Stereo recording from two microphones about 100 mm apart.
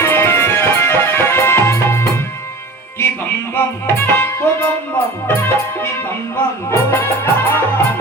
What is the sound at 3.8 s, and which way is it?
Music, 20° left (ahead or behind).